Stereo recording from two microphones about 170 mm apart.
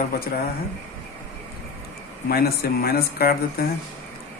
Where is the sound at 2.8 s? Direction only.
65° left (ahead or behind).